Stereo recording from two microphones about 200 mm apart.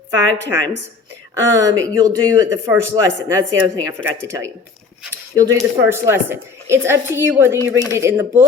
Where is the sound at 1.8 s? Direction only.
15° right (ahead or behind).